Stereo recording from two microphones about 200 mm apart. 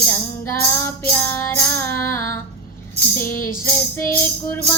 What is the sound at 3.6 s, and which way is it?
Child singing, 10° left (ahead or behind).